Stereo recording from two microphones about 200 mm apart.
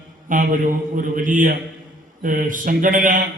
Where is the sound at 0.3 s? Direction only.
40° right (ahead or behind).